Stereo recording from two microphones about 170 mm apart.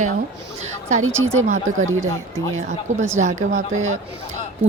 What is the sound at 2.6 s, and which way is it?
Speech, 45° right (ahead or behind).